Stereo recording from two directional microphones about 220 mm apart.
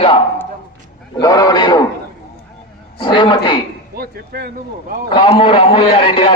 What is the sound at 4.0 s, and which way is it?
Speech, 40° right (ahead or behind).